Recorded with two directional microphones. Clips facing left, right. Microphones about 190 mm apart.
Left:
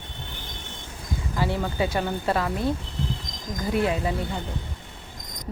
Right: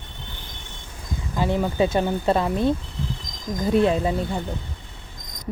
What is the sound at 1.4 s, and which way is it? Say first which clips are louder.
Speech: right 5 dB; 15° right (ahead or behind).